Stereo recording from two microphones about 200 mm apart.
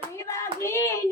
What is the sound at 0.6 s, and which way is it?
Child singing, 15° left (ahead or behind).